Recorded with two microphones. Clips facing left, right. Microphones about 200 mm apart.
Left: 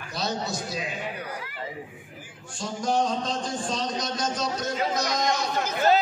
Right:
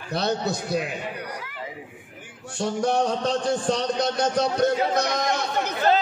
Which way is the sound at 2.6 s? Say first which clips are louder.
Right 3 dB; 65° right (ahead or behind).